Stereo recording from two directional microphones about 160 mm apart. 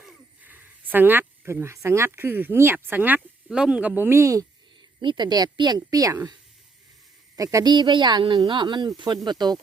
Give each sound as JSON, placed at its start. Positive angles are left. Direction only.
{"t": 0.4, "sound": "speech", "side_deg": -10}
{"t": 4.9, "sound": "a woman's voice", "side_deg": -30}
{"t": 7.3, "sound": "a woman's voice", "side_deg": -20}